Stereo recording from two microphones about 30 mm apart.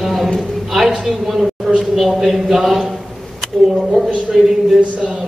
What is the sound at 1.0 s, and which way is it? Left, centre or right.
A woman's voice, centre.